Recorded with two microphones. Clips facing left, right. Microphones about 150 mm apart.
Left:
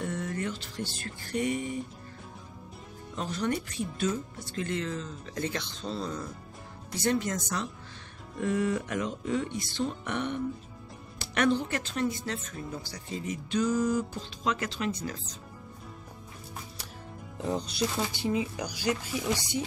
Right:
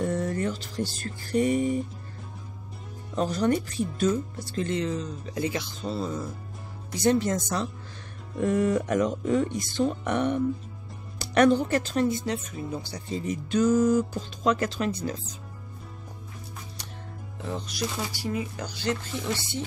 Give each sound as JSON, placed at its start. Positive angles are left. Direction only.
{"t": 0.0, "sound": "music", "side_deg": -35}
{"t": 3.2, "sound": "speech", "side_deg": -40}
{"t": 4.6, "sound": "speech", "side_deg": -20}
{"t": 7.2, "sound": "speech", "side_deg": -30}
{"t": 8.4, "sound": "speech", "side_deg": -45}
{"t": 12.1, "sound": "speech", "side_deg": -20}
{"t": 12.4, "sound": "speech", "side_deg": -10}
{"t": 12.9, "sound": "speech", "side_deg": -30}
{"t": 17.4, "sound": "speech", "side_deg": 35}
{"t": 18.1, "sound": "speech", "side_deg": 20}